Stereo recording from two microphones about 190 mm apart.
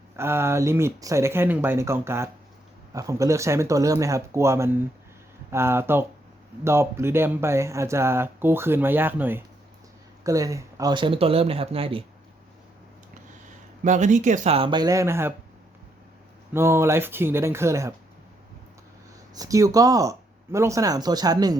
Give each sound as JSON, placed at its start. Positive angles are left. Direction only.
{"t": 0.2, "sound": "speech", "side_deg": -15}
{"t": 13.8, "sound": "speech", "side_deg": -40}
{"t": 16.5, "sound": "speech", "side_deg": -15}
{"t": 19.3, "sound": "speech", "side_deg": -20}